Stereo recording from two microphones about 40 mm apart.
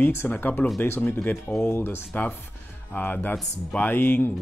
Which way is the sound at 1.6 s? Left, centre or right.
Left.